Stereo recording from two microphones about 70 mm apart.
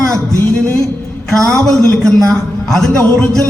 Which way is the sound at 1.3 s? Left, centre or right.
Centre.